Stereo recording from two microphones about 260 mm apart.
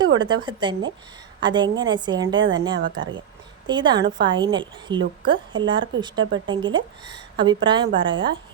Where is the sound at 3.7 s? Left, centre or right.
Centre.